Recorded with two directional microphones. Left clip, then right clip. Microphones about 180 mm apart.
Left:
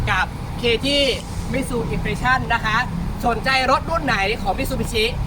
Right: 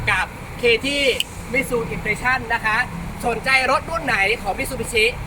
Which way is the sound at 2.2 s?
Centre (ahead or behind).